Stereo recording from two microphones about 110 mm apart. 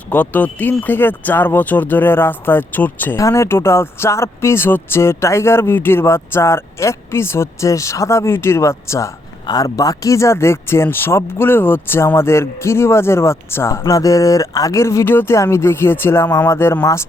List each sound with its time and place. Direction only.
0.1 s speech: 15° left (ahead or behind)
3.2 s speech: 30° left (ahead or behind)